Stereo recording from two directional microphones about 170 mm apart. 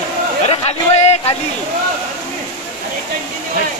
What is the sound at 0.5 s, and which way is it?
Chatter, 40° left (ahead or behind).